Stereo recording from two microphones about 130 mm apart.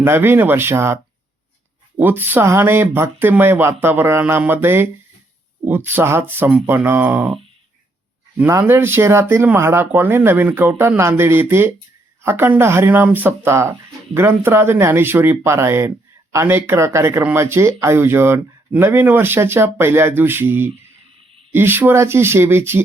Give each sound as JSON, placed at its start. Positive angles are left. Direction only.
{"t": 0.0, "sound": "speech", "side_deg": -15}
{"t": 2.0, "sound": "speech", "side_deg": -15}
{"t": 8.4, "sound": "speech", "side_deg": -20}